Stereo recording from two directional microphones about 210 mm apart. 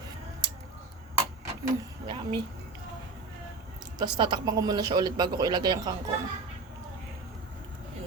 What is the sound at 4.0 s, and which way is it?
A woman's voice, 20° right (ahead or behind).